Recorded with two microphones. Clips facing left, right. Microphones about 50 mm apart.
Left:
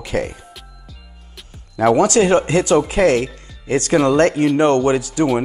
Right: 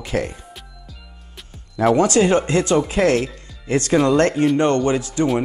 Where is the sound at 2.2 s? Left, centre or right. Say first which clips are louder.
Left 2 dB; centre.